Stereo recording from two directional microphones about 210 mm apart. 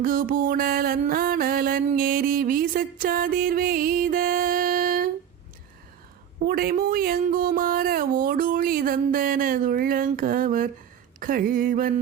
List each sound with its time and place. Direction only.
0.0 s mantra: 45° right (ahead or behind)
6.4 s mantra: 45° right (ahead or behind)
11.2 s a sound: 40° right (ahead or behind)